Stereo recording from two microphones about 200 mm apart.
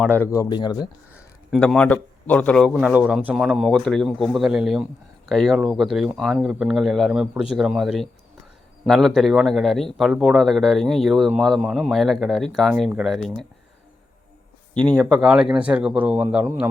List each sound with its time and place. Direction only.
0.2 s speech: 15° left (ahead or behind)
1.5 s a man's voice: 5° left (ahead or behind)
14.7 s a man's voice: 5° left (ahead or behind)